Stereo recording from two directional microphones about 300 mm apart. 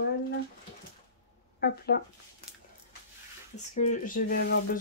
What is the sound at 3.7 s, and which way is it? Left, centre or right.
Speech, left.